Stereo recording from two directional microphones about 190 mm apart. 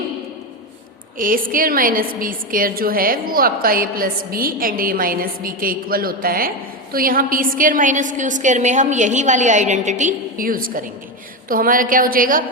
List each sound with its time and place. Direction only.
1.2 s a woman's voice: 45° right (ahead or behind)